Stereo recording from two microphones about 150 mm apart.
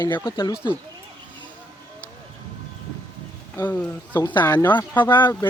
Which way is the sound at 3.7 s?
15° left (ahead or behind).